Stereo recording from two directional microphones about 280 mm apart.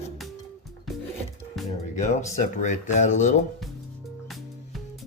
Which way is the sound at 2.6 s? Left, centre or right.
Left.